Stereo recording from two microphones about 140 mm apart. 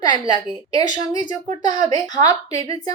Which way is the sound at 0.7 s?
30° left (ahead or behind).